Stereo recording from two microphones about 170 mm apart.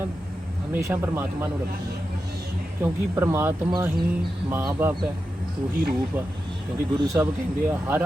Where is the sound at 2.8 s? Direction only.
15° right (ahead or behind).